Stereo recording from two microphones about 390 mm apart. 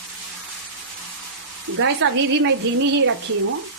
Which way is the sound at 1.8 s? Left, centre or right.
Right.